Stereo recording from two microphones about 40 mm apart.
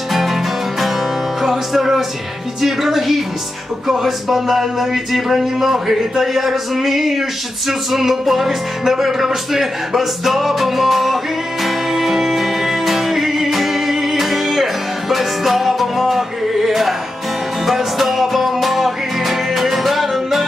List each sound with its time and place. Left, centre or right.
0.1 s music: centre
1.4 s music: centre
4.0 s a man's voice: centre
7.7 s music: centre